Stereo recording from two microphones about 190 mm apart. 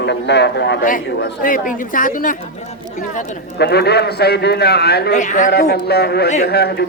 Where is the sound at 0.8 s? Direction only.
50° left (ahead or behind).